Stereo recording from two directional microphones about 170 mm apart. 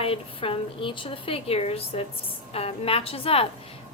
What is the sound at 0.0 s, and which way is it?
A woman's voice, 35° left (ahead or behind).